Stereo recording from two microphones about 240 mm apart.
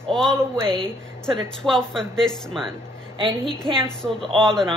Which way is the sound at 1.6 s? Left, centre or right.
Centre.